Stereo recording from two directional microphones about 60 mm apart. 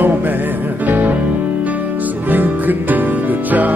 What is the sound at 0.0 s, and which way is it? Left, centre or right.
Music, right.